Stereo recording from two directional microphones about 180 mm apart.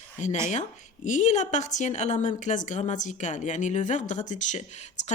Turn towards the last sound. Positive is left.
turn(degrees=40)  # may be behind; listen again after turning